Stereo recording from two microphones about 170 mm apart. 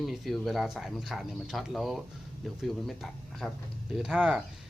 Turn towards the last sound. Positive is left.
turn(degrees=-5)  # may be behind; listen again after turning